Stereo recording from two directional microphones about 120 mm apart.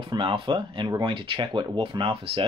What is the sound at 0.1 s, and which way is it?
Speech, 45° right (ahead or behind).